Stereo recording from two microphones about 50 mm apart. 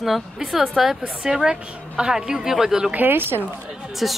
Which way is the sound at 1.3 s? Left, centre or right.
Centre.